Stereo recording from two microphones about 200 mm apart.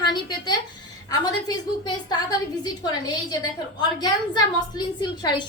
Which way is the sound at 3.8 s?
20° left (ahead or behind).